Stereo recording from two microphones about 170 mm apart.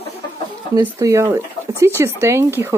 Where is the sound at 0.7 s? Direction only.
20° right (ahead or behind).